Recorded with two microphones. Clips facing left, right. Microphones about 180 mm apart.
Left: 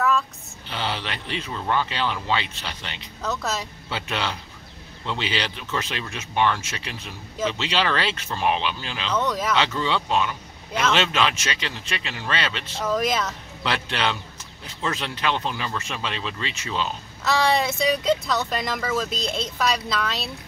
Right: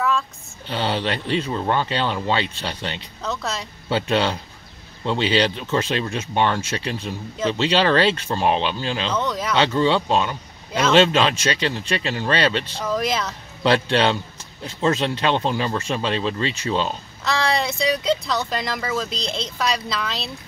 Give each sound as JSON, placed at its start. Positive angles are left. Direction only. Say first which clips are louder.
{"t": 0.7, "sound": "speech", "louder": "right 6 dB", "side_deg": -35}
{"t": 3.2, "sound": "speech", "louder": "left 1 dB", "side_deg": 0}
{"t": 3.9, "sound": "speech", "louder": "right 8 dB", "side_deg": -30}
{"t": 9.1, "sound": "speech", "louder": "left 4 dB", "side_deg": 0}
{"t": 9.6, "sound": "speech", "louder": "right 6 dB", "side_deg": -30}
{"t": 12.7, "sound": "speech", "louder": "even", "side_deg": 0}
{"t": 13.6, "sound": "speech", "louder": "right 9 dB", "side_deg": -30}
{"t": 17.2, "sound": "speech", "louder": "left 1 dB", "side_deg": 5}